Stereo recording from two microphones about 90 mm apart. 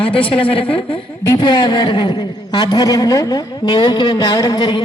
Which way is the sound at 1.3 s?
60° left (ahead or behind).